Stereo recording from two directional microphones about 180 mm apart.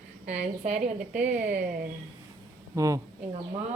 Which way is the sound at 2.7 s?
20° right (ahead or behind).